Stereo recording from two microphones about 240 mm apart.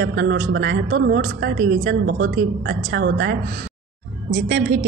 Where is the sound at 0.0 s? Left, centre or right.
Right.